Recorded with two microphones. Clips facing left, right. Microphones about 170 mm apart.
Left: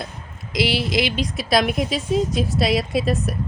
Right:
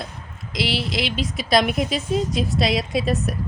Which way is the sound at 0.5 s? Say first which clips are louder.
Left 4 dB; centre (ahead or behind).